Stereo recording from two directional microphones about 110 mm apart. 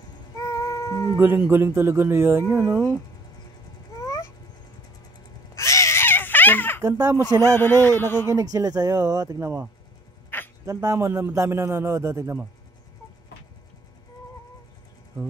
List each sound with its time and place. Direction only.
0.4 s music: 35° left (ahead or behind)
1.1 s a man's voice: 20° right (ahead or behind)
5.5 s baby cry: 30° left (ahead or behind)
6.8 s speech: 30° right (ahead or behind)
7.4 s speech: 20° left (ahead or behind)
8.3 s a man's voice: 30° right (ahead or behind)